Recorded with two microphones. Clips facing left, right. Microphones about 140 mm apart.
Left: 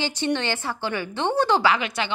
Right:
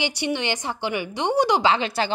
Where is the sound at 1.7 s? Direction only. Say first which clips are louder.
Right 2 dB; 30° right (ahead or behind).